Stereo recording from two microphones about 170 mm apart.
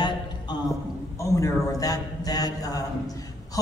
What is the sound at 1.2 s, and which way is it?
A man's voice, 20° left (ahead or behind).